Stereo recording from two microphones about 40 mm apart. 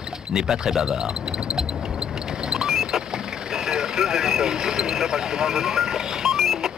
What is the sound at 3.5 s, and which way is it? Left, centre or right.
Speech, centre.